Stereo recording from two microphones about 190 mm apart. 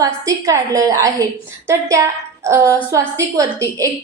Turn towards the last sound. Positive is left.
turn(degrees=-15)  # may be behind; listen again after turning